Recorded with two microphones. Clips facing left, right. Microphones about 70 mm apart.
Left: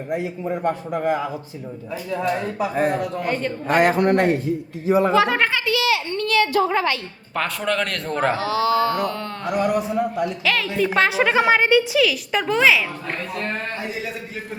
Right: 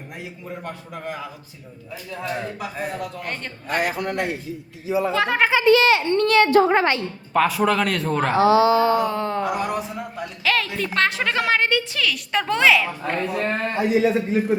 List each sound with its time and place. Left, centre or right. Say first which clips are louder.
0.4 s a man's voice: left 9 dB; left
2.7 s speech: left 10 dB; left
3.2 s a woman's voice: left 8 dB; centre
3.8 s a man's voice: left 7 dB; left
5.1 s a woman's voice: left 2 dB; centre
5.6 s a child's voice: right 6 dB; right
7.3 s a woman's voice: right 4 dB; centre
8.4 s a man's voice: right 4 dB; right
9.0 s carnatic music: right 3 dB; centre
9.6 s a woman's voice: left 6 dB; centre
11.9 s a woman's voice: left 4 dB; centre
13.1 s a man's voice: right 5 dB; centre